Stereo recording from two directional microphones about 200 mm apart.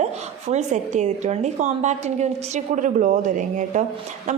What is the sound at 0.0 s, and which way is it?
A woman's voice, 35° right (ahead or behind).